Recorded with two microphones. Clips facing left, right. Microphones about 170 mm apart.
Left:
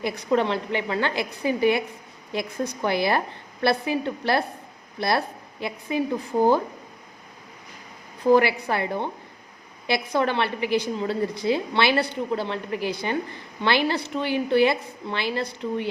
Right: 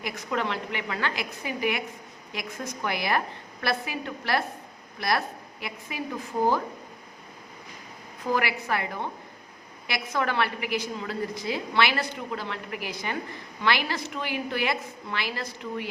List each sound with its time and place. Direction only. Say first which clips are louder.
0.0 s a woman's voice: left 7 dB; 30° left (ahead or behind)
8.3 s a woman's voice: left 8 dB; 30° left (ahead or behind)